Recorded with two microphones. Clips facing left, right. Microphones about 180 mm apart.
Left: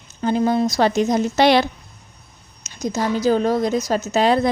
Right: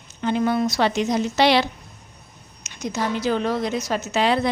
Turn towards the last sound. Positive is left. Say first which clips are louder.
# left 4 dB
turn(degrees=45)  # may be behind; listen again after turning